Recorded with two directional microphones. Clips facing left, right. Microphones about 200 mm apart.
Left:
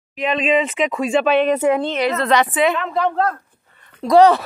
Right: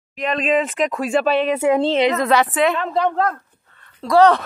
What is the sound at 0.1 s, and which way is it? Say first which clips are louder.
Speech: left 1 dB; centre (ahead or behind).